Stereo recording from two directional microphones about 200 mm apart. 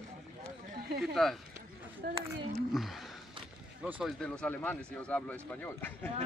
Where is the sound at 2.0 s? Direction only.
50° right (ahead or behind).